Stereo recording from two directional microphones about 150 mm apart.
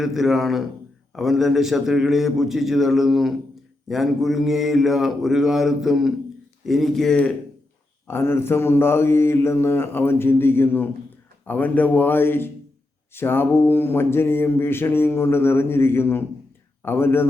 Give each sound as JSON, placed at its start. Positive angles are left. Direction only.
{"t": 0.0, "sound": "mantra", "side_deg": 0}